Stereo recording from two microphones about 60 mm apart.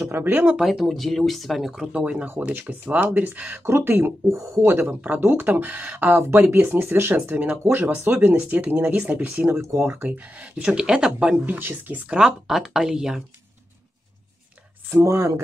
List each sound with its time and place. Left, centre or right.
0.3 s speech: right
0.6 s speech: centre
2.4 s speech: right
3.6 s speech: right
9.6 s speech: right
9.8 s speech: right; by 11.3 s centre
11.4 s speech: right
12.1 s speech: centre
14.9 s speech: right